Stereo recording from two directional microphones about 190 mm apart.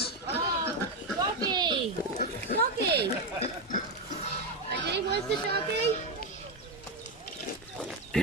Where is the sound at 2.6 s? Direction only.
55° right (ahead or behind).